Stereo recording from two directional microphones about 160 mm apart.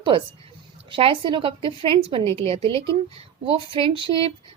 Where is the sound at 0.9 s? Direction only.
30° right (ahead or behind).